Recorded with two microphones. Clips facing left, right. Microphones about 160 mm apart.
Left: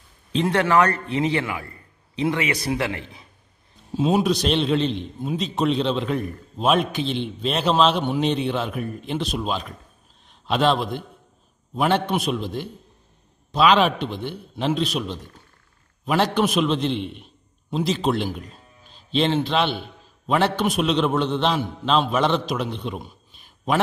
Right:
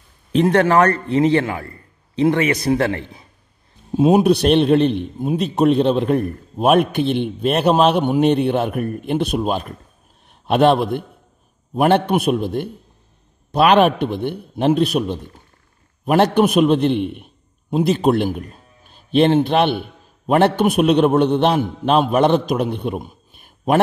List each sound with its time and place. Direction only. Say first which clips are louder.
0.4 s speech: right 6 dB; 20° right (ahead or behind)
0.9 s a man's voice: right 7 dB; 20° left (ahead or behind)
2.7 s a man's voice: right 9 dB; 40° right (ahead or behind)
3.9 s a man's voice: right 7 dB; 55° right (ahead or behind)